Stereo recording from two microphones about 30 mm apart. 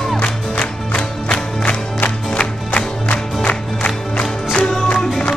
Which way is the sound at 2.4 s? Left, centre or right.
Left.